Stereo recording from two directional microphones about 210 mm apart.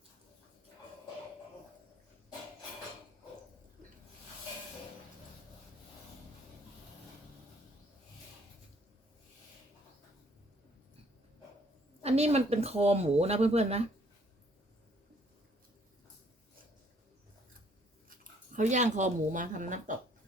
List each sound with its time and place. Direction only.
12.0 s speech: 30° right (ahead or behind)
18.2 s speech: 35° right (ahead or behind)